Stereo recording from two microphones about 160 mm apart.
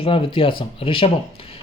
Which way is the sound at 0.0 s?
35° left (ahead or behind).